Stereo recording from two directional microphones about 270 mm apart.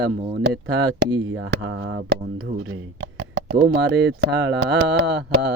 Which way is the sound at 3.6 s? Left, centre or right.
Right.